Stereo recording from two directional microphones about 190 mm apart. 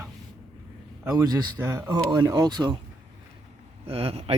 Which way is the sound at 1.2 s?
20° right (ahead or behind).